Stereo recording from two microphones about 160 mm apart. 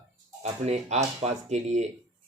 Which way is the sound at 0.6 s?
45° right (ahead or behind).